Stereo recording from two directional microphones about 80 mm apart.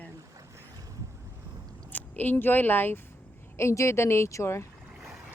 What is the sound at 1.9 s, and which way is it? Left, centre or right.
Speech, left.